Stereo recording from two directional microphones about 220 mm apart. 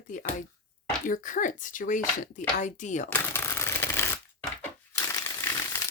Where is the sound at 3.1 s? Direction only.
10° left (ahead or behind).